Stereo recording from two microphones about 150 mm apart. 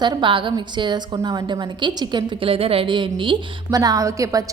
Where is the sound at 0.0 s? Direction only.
30° right (ahead or behind).